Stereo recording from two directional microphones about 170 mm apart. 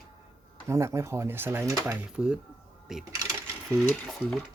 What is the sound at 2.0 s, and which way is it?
Speech, 5° right (ahead or behind).